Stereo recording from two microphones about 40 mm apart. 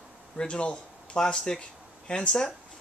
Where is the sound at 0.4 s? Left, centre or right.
Left.